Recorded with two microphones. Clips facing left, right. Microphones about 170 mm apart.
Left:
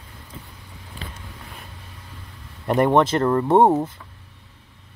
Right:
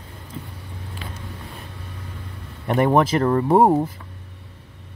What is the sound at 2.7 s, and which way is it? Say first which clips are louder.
Speech: even; 5° right (ahead or behind).